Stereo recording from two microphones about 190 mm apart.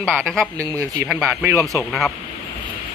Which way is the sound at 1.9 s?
Centre (ahead or behind).